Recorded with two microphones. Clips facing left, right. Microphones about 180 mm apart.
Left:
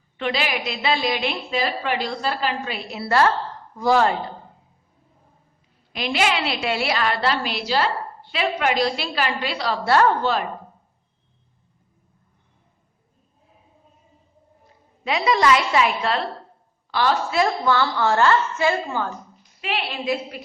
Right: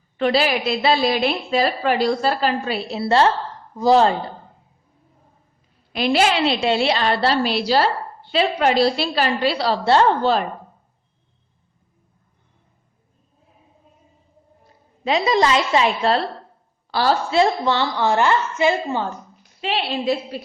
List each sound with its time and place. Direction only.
0.2 s a woman's voice: 35° right (ahead or behind)
2.9 s a woman's voice: 25° right (ahead or behind)
5.9 s a woman's voice: 35° right (ahead or behind)
15.0 s a woman's voice: 30° right (ahead or behind)